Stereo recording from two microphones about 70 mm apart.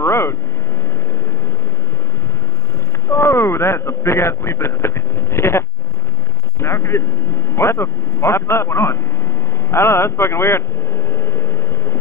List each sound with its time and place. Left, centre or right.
0.0 s vehicle: left
3.1 s a man's voice: left
11.1 s vehicle: left